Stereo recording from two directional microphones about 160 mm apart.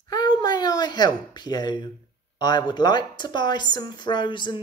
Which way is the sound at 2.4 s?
25° left (ahead or behind).